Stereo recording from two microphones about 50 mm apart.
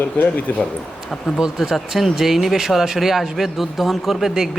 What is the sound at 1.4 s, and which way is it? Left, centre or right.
Speech, centre.